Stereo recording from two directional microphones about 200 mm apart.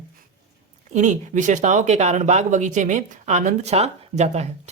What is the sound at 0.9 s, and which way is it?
Speech, 35° right (ahead or behind).